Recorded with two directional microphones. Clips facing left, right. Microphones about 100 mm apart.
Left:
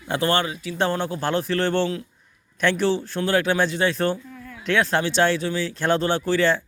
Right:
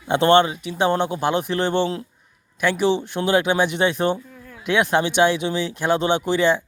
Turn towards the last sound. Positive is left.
turn(degrees=-15)  # may be behind; listen again after turning